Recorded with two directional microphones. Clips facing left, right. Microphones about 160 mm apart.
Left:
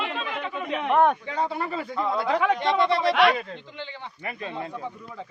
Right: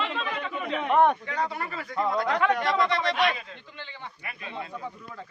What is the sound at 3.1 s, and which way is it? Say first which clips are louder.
Speech: left 6 dB; 75° left (ahead or behind).